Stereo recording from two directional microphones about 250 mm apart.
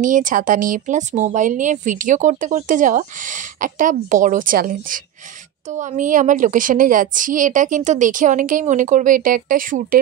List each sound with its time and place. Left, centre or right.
0.0 s a woman's voice: right